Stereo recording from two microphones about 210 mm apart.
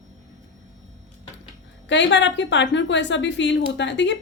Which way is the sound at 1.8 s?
60° left (ahead or behind).